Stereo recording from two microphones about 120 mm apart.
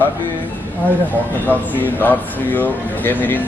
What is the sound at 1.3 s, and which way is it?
Speech, 15° left (ahead or behind).